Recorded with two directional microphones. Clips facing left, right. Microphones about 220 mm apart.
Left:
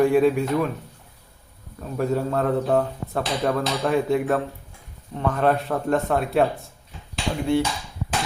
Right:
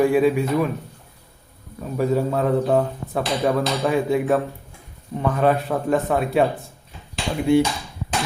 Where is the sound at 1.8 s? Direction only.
Centre (ahead or behind).